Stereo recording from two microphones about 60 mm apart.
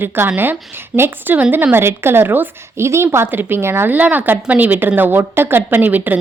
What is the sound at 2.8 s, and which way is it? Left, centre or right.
A woman's voice, right.